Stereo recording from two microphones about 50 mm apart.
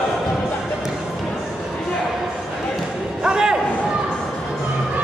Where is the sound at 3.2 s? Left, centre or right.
Centre.